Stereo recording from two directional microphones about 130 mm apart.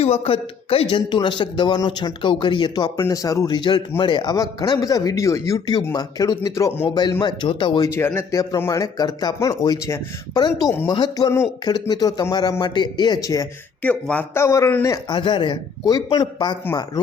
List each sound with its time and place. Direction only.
0.0 s a man's voice: 50° left (ahead or behind)
3.0 s a man's voice: 25° left (ahead or behind)
6.8 s a man's voice: 35° left (ahead or behind)
7.9 s a man's voice: 20° left (ahead or behind)
13.8 s a man's voice: 10° left (ahead or behind)
15.1 s a man's voice: 35° left (ahead or behind)